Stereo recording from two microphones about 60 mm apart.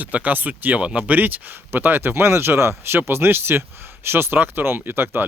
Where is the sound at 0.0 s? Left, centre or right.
Right.